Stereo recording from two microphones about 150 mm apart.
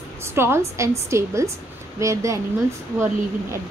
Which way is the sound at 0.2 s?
15° right (ahead or behind).